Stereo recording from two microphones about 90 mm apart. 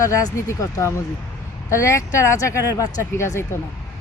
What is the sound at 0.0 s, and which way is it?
A woman's voice, 35° left (ahead or behind).